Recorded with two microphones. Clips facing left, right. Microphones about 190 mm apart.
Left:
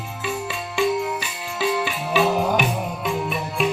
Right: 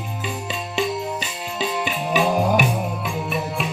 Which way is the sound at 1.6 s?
20° right (ahead or behind).